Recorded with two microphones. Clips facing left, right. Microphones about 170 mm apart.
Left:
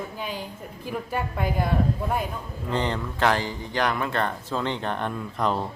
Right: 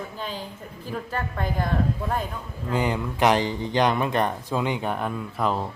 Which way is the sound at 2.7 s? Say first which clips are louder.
Right 2 dB; 10° right (ahead or behind).